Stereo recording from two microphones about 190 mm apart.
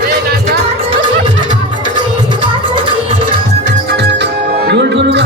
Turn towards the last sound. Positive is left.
turn(degrees=-65)  # may be behind; listen again after turning